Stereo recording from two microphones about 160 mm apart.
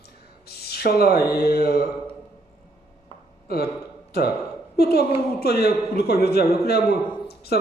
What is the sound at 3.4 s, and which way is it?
Speech, 75° left (ahead or behind).